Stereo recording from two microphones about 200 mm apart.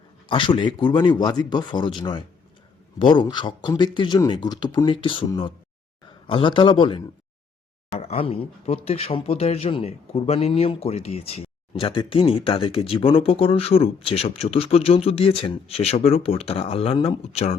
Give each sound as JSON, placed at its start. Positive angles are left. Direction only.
{"t": 0.3, "sound": "a man's voice", "side_deg": 25}